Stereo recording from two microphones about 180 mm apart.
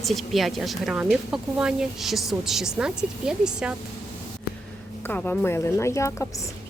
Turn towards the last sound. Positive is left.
turn(degrees=15)  # may be behind; listen again after turning